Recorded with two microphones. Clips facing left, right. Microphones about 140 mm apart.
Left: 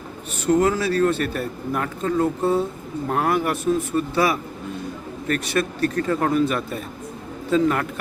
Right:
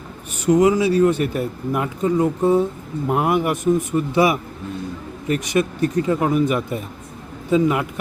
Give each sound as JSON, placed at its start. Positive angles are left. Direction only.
{"t": 0.4, "sound": "speech", "side_deg": -10}